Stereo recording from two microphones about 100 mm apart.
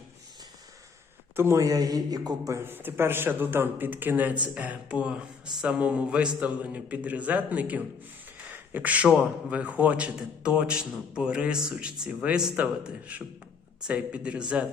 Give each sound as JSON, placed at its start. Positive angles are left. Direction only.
{"t": 1.4, "sound": "a man's voice", "side_deg": -30}
{"t": 2.6, "sound": "a man's voice", "side_deg": -20}